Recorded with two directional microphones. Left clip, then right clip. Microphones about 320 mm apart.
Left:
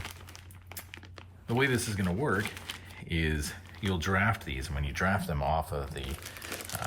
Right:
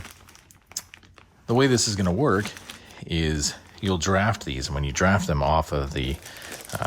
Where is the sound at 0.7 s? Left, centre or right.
Centre.